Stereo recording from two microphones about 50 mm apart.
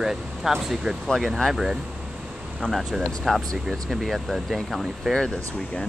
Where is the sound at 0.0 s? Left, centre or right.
Centre.